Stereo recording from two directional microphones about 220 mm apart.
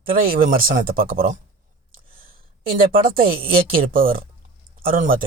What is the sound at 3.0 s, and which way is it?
Speech, 40° right (ahead or behind).